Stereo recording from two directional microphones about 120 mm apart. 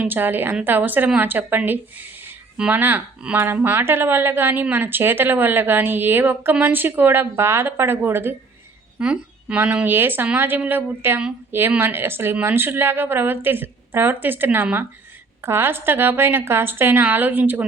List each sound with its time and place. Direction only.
0.0 s speech: 15° right (ahead or behind)